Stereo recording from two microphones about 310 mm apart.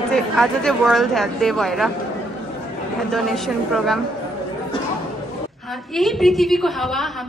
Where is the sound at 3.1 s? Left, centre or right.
Centre.